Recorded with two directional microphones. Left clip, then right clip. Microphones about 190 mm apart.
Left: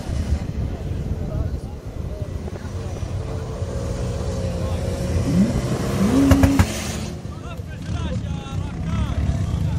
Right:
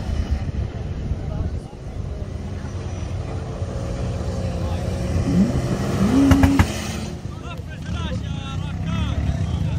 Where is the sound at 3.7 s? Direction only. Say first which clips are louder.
Left 2 dB; 25° left (ahead or behind).